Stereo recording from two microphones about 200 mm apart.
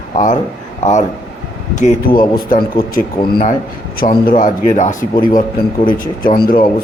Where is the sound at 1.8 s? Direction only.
40° left (ahead or behind).